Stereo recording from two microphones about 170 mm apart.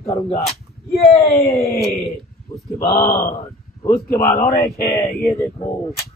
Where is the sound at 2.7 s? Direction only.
15° left (ahead or behind).